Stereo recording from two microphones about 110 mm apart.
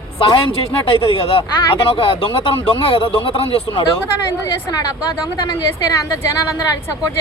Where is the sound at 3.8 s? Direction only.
35° left (ahead or behind).